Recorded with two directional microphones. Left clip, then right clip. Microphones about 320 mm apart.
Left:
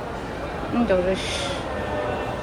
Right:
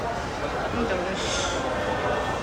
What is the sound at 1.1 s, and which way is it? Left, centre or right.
Speech, centre.